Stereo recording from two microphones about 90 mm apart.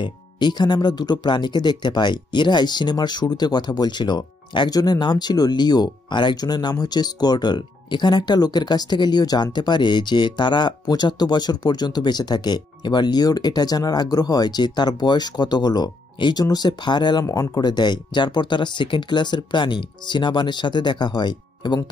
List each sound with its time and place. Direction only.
0.0 s speech: 55° left (ahead or behind)